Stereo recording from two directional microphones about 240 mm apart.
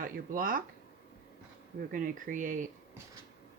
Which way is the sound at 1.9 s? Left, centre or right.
Right.